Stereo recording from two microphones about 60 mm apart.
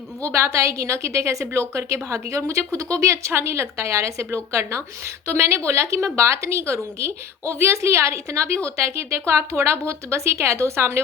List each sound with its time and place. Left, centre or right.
0.4 s a woman's voice: right
3.3 s a woman's voice: right